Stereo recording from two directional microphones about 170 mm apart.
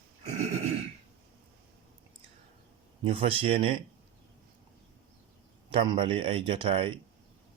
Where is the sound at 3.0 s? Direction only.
30° right (ahead or behind).